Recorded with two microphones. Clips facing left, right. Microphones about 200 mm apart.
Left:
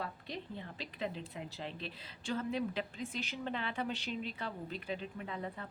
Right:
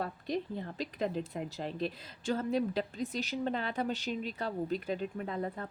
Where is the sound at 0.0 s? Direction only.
40° right (ahead or behind).